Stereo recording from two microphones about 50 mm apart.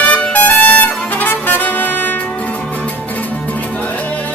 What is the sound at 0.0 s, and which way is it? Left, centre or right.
Trumpet, left.